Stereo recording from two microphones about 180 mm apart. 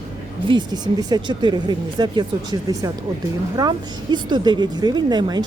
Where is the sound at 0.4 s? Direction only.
25° right (ahead or behind).